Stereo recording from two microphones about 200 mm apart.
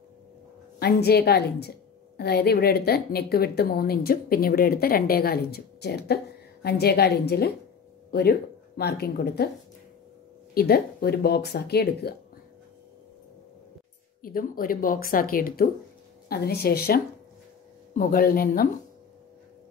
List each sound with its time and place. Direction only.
0.7 s a woman's voice: 50° left (ahead or behind)
10.5 s a woman's voice: 50° left (ahead or behind)
14.2 s a woman's voice: 45° left (ahead or behind)